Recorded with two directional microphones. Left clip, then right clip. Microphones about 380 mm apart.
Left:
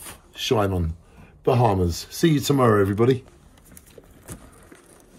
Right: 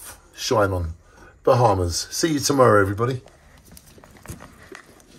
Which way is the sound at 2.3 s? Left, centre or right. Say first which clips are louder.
Right 4 dB; right.